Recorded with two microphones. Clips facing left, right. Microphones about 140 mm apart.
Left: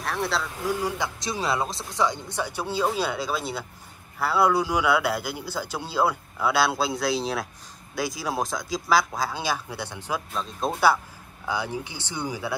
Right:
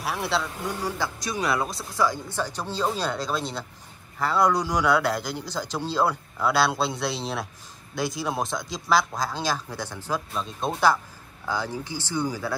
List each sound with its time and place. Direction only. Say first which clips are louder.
0.0 s speech: even; centre (ahead or behind)
0.7 s a man's voice: left 1 dB; 15° left (ahead or behind)
10.3 s a man's voice: left 1 dB; centre (ahead or behind)